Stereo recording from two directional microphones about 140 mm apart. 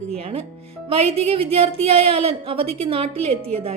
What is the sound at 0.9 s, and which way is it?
A woman's voice, 45° right (ahead or behind).